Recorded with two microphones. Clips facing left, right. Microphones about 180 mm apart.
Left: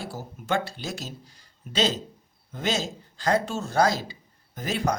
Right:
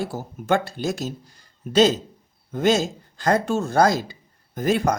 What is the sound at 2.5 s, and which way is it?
A man's voice, 50° right (ahead or behind).